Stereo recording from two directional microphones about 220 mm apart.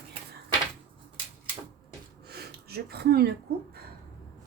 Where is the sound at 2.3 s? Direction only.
45° right (ahead or behind).